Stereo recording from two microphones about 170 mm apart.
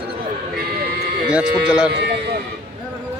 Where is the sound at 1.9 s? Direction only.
90° right.